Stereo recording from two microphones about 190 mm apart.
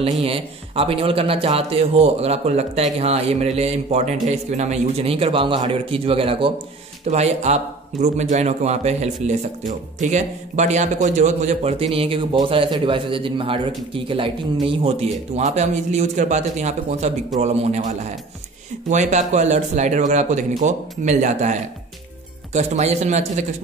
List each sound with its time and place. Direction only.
0.2 s a man's voice: 30° right (ahead or behind)